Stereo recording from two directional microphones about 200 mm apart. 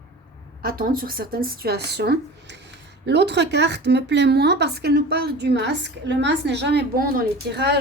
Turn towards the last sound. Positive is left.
turn(degrees=-55)  # may be behind; listen again after turning